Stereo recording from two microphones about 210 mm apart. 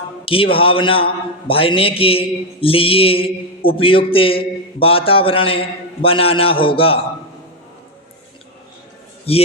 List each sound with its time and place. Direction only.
0.3 s a man's voice: 25° left (ahead or behind)
9.3 s a man's voice: 30° left (ahead or behind)